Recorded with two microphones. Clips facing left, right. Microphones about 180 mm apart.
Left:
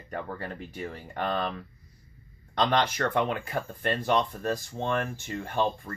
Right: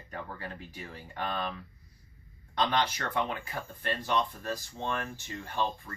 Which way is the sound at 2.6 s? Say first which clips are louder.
Left 4 dB; 50° left (ahead or behind).